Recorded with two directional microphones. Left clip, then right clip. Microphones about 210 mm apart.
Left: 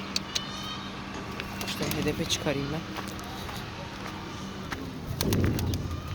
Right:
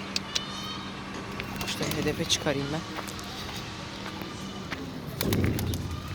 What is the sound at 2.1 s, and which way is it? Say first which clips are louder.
Speech: right 3 dB; 5° right (ahead or behind).